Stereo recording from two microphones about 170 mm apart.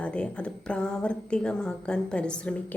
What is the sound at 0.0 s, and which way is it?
A woman's voice, 5° left (ahead or behind).